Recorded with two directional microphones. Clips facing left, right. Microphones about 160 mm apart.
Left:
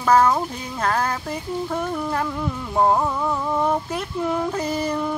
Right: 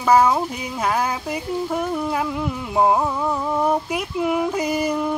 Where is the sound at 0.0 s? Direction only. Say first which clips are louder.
Right 1 dB; 10° right (ahead or behind).